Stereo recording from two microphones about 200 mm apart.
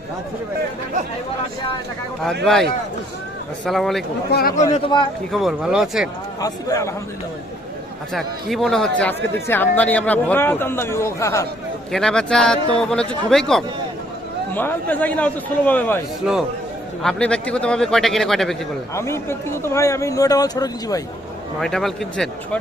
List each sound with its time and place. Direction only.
3.7 s a man's voice: centre (ahead or behind)
4.3 s speech: 50° left (ahead or behind)
4.7 s speech: 25° left (ahead or behind)
5.3 s a man's voice: centre (ahead or behind)
6.4 s speech: 15° left (ahead or behind)
8.1 s speech: centre (ahead or behind)
11.9 s a man's voice: centre (ahead or behind)
16.2 s a man's voice: 5° right (ahead or behind)
18.9 s speech: 15° left (ahead or behind)
21.6 s a man's voice: centre (ahead or behind)